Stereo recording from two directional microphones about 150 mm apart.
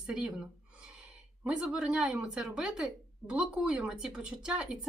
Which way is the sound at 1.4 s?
5° right (ahead or behind).